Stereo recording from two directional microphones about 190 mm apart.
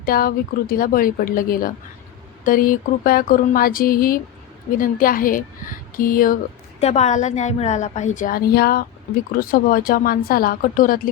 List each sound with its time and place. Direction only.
0.0 s speech: 50° left (ahead or behind)
6.7 s a woman's voice: 35° left (ahead or behind)